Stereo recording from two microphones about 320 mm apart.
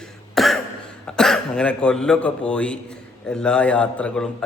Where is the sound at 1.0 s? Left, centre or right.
Centre.